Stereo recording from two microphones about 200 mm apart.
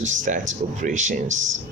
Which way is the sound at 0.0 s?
40° right (ahead or behind).